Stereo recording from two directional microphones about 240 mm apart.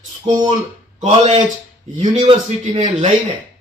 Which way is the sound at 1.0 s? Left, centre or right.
Right.